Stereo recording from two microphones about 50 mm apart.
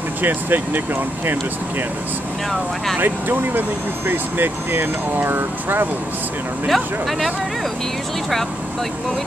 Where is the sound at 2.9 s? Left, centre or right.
Right.